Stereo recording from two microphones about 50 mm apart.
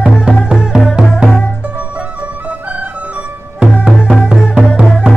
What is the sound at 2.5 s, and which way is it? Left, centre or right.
Music, right.